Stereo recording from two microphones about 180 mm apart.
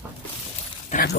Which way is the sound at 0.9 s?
40° left (ahead or behind).